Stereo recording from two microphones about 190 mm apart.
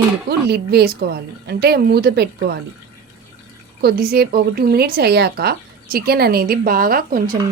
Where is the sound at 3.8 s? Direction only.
55° right (ahead or behind).